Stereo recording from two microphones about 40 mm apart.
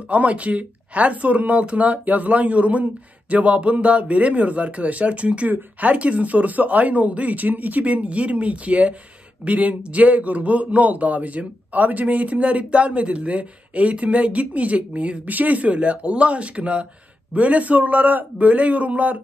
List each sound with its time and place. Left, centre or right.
0.1 s a man's voice: right